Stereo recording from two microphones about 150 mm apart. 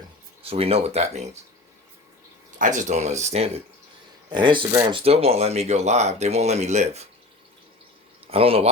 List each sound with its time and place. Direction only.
0.4 s speech: 40° right (ahead or behind)
2.6 s speech: 55° right (ahead or behind)
4.3 s speech: 30° right (ahead or behind); by 7.1 s 45° right (ahead or behind)
8.3 s speech: 40° right (ahead or behind)